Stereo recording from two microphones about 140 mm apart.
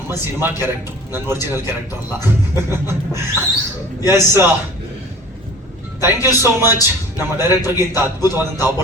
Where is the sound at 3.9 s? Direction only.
25° left (ahead or behind).